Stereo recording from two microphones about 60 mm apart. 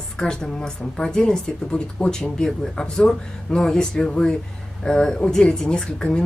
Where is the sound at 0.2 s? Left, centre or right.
Centre.